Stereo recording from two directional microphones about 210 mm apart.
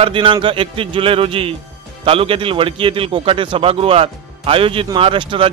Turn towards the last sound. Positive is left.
turn(degrees=-25)  # may be behind; listen again after turning